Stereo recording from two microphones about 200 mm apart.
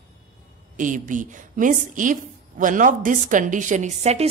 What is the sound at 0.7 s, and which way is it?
A woman's voice, 40° right (ahead or behind).